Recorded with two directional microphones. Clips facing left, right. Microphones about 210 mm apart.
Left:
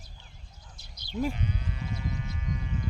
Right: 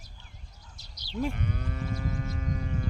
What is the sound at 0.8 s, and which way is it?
Quack, 55° left (ahead or behind).